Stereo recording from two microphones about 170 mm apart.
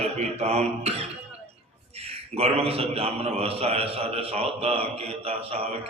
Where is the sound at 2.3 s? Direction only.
35° right (ahead or behind).